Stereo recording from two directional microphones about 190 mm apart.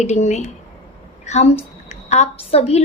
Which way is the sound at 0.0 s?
35° left (ahead or behind).